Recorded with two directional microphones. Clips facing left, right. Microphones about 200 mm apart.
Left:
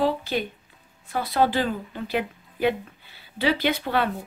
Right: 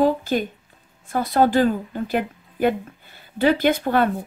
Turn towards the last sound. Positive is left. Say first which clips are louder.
# right 5 dB
turn(degrees=-45)  # may be behind; listen again after turning